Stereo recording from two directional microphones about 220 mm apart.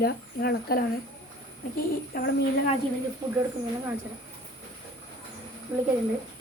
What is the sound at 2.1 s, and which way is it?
Speech, 40° left (ahead or behind).